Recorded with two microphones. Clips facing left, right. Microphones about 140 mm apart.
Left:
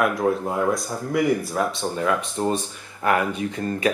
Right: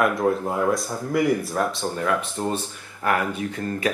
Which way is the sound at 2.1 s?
15° left (ahead or behind).